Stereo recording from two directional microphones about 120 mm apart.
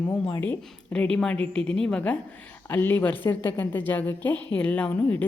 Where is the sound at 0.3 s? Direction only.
20° left (ahead or behind).